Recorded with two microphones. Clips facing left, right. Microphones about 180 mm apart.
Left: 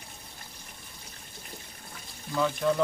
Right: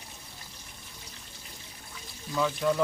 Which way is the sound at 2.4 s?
Centre (ahead or behind).